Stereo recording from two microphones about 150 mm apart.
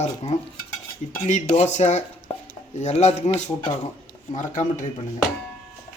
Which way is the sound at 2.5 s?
50° left (ahead or behind).